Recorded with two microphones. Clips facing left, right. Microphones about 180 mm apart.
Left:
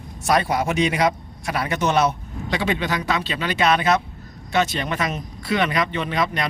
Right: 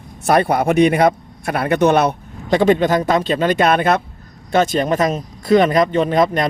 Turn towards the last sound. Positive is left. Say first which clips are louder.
# right 8 dB
turn(degrees=-45)  # may be behind; listen again after turning